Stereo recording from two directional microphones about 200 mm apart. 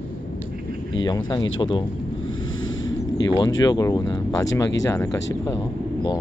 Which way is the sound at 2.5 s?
70° left (ahead or behind).